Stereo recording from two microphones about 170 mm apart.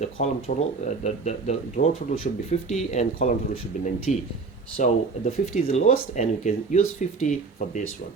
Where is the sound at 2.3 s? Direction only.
60° left (ahead or behind).